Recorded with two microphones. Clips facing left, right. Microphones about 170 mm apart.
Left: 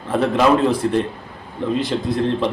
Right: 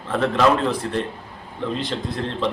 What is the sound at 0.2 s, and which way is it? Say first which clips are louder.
Speech: left 3 dB; 10° left (ahead or behind).